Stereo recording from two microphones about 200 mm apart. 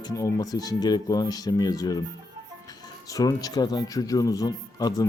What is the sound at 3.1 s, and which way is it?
Speech, 15° left (ahead or behind).